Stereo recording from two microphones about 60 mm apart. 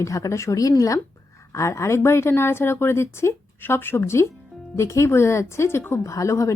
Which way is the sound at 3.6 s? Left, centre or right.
Left.